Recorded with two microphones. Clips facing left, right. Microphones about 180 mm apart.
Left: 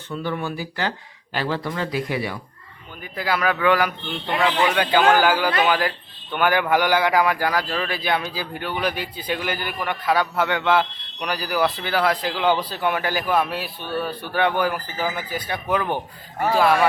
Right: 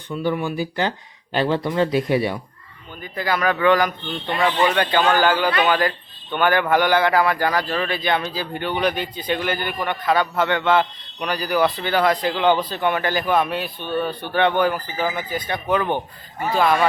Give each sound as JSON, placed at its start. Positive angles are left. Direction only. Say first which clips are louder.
{"t": 0.2, "sound": "speech", "louder": "right 5 dB", "side_deg": -15}
{"t": 3.0, "sound": "a man's voice", "louder": "right 1 dB", "side_deg": 10}